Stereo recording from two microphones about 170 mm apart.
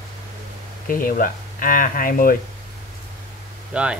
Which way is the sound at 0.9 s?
55° left (ahead or behind).